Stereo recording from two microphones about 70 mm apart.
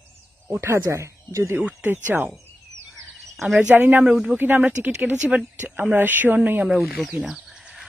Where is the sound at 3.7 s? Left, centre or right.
Right.